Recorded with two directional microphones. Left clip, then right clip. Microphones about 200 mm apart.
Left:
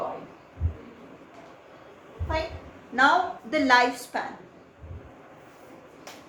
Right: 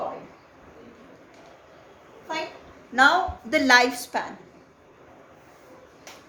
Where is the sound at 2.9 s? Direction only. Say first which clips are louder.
Right 2 dB; 45° right (ahead or behind).